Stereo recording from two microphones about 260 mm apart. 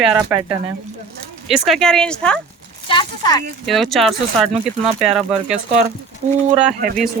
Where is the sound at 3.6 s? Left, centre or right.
Centre.